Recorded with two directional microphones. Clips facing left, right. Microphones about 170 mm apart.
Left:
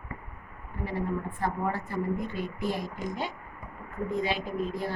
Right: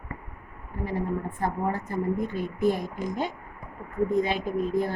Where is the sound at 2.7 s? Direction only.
50° right (ahead or behind).